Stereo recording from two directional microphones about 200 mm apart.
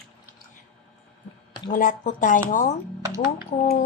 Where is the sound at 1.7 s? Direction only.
40° left (ahead or behind).